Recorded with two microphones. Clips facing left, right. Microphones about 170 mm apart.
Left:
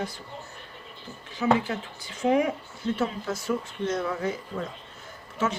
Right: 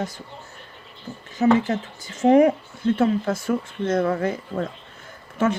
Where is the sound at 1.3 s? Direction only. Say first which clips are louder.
Right 6 dB; 45° right (ahead or behind).